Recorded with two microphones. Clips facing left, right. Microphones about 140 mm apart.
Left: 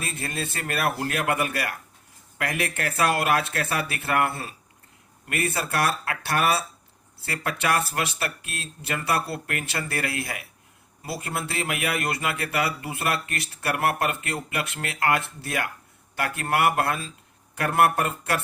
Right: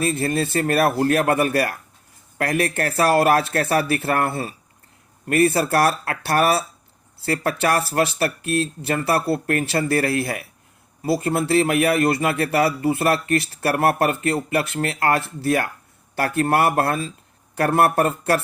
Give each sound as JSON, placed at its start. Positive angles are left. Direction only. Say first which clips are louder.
{"t": 0.1, "sound": "speech", "louder": "right 10 dB", "side_deg": -35}
{"t": 5.3, "sound": "speech", "louder": "right 10 dB", "side_deg": -35}